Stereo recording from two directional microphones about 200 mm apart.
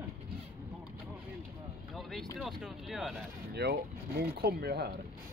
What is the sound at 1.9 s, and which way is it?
Vehicle, centre (ahead or behind).